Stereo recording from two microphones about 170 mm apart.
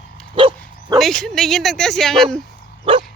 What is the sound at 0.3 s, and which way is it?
Dog, 30° right (ahead or behind).